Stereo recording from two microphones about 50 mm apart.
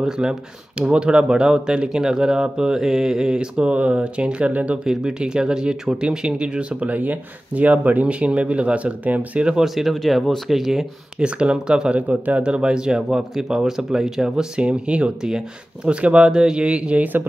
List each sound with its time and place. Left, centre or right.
0.2 s speech: centre
4.5 s speech: right
4.8 s speech: centre
6.9 s speech: right
9.6 s speech: centre
11.1 s speech: right